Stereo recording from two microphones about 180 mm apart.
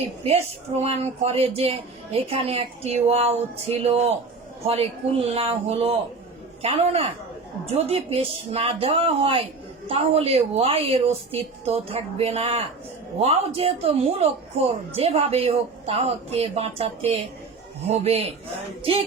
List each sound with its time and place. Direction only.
0.8 s speech: 35° right (ahead or behind)